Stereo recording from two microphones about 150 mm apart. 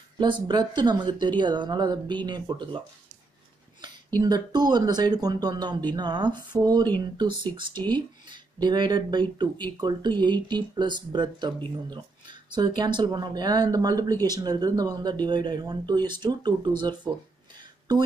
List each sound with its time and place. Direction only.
0.2 s speech: 30° right (ahead or behind)
4.2 s speech: 30° right (ahead or behind)
8.3 s speech: 30° right (ahead or behind)